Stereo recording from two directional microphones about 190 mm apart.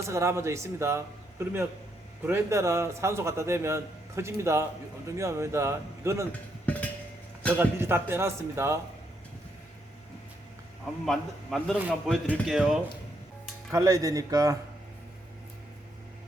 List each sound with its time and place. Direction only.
0.1 s a man's voice: 15° right (ahead or behind)
6.7 s a sound: 10° left (ahead or behind)
7.6 s a man's voice: 10° right (ahead or behind)
11.0 s a man's voice: centre (ahead or behind)
13.7 s a man's voice: 15° right (ahead or behind)